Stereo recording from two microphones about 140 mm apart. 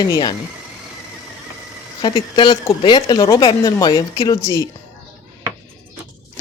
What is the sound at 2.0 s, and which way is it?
Speech, 35° left (ahead or behind).